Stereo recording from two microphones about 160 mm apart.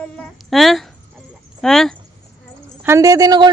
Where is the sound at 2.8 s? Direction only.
20° right (ahead or behind).